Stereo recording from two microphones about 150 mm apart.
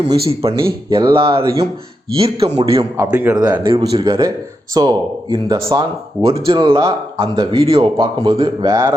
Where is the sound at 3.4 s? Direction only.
30° right (ahead or behind).